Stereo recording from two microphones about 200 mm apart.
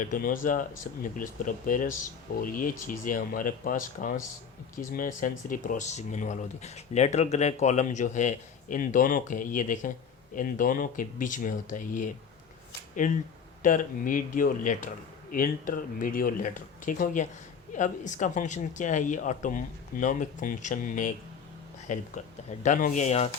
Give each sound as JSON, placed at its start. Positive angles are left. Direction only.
{"t": 0.0, "sound": "speech", "side_deg": 40}